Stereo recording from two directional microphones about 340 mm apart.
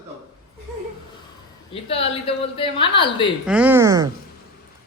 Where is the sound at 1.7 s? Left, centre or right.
Centre.